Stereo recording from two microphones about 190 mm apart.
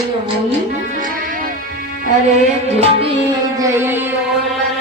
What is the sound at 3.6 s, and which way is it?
Music, 15° right (ahead or behind).